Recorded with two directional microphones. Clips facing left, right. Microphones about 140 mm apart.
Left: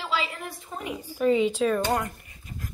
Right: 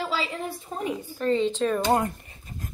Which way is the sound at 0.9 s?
10° left (ahead or behind).